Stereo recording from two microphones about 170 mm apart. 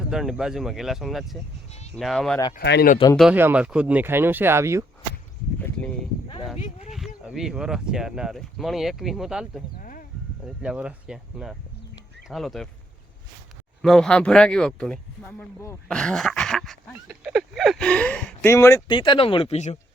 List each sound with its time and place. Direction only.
0.1 s speech: centre (ahead or behind)
2.6 s speech: 70° left (ahead or behind)
3.2 s speech: 10° right (ahead or behind)
5.5 s a sound: 5° left (ahead or behind)
6.6 s speech: 45° left (ahead or behind)
6.9 s speech: centre (ahead or behind)
9.7 s a sound: 55° left (ahead or behind)
10.4 s speech: 5° right (ahead or behind)
13.8 s speech: 5° left (ahead or behind)
18.9 s speech: 30° left (ahead or behind)